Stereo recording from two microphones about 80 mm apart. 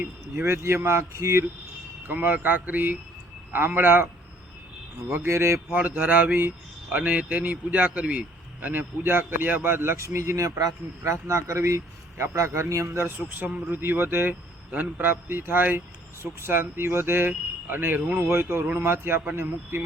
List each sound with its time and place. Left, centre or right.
0.0 s a man's voice: right
2.0 s a man's voice: right
5.7 s a man's voice: right